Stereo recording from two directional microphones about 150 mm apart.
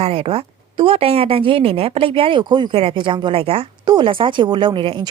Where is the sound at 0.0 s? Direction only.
40° right (ahead or behind).